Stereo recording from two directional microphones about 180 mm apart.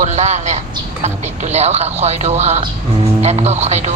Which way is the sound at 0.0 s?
40° right (ahead or behind).